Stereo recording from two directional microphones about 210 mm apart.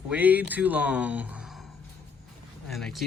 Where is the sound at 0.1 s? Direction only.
10° right (ahead or behind).